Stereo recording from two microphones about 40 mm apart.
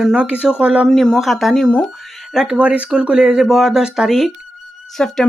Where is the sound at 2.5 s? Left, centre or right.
Right.